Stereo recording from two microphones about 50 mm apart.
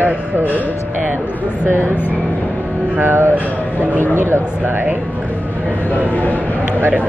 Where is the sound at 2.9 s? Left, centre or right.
Right.